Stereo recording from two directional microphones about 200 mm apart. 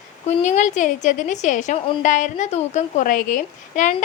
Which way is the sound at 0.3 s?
35° left (ahead or behind).